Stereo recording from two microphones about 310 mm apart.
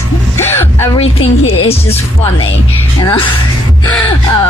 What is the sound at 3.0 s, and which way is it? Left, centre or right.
Speech, centre.